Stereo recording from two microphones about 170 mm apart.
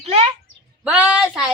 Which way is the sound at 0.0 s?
35° right (ahead or behind).